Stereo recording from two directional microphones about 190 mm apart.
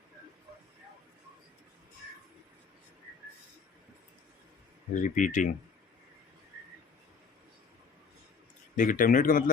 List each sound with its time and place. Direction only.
4.9 s speech: 40° left (ahead or behind)
8.7 s speech: 45° left (ahead or behind)